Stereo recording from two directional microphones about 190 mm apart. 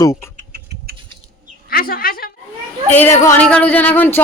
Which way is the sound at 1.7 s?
50° left (ahead or behind).